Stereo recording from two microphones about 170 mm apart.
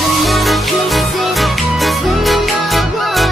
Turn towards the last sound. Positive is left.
turn(degrees=0)  # may be behind; listen again after turning